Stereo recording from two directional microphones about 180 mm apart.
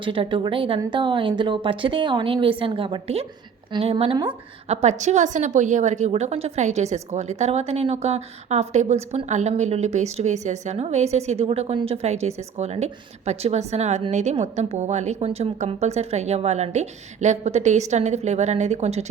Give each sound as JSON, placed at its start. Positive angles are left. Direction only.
{"t": 0.0, "sound": "a woman's voice", "side_deg": -30}